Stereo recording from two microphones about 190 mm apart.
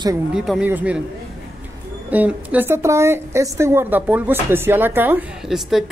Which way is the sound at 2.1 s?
10° right (ahead or behind).